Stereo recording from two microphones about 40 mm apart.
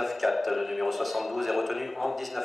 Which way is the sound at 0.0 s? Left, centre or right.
Centre.